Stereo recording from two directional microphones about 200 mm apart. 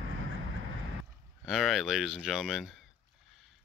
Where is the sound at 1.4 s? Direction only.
Centre (ahead or behind).